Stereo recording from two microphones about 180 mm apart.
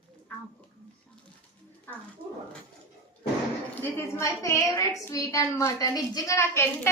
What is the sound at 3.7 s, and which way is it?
A woman's voice, 10° left (ahead or behind).